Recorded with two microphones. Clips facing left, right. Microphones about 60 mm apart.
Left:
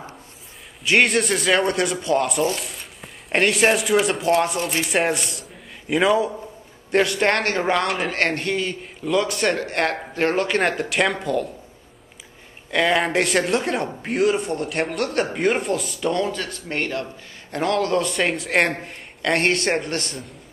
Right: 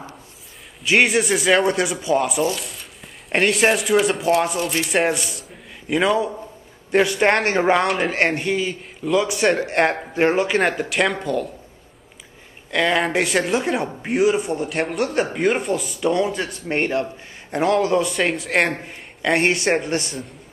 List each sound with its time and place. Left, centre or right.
0.8 s speech: centre
7.2 s speech: centre
12.7 s speech: centre
16.3 s a man's voice: right